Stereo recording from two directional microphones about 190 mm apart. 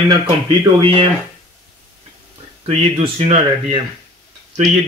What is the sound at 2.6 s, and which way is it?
Speech, 30° right (ahead or behind).